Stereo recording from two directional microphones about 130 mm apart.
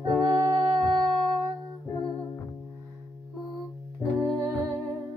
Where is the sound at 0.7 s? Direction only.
5° left (ahead or behind).